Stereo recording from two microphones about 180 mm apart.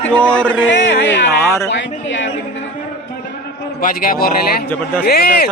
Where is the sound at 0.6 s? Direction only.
85° left.